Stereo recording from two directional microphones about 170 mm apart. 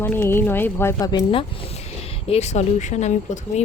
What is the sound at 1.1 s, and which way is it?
Speech, 25° left (ahead or behind).